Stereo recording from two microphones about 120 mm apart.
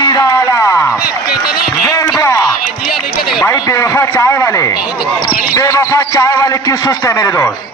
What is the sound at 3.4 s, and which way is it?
Speech, 30° left (ahead or behind).